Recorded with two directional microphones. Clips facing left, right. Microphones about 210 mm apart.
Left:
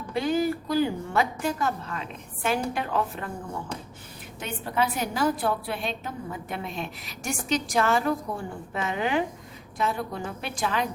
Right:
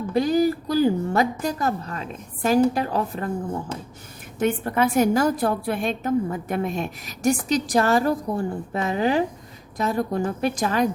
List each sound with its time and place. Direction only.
0.1 s a woman's voice: 40° right (ahead or behind)
4.4 s a woman's voice: 50° right (ahead or behind)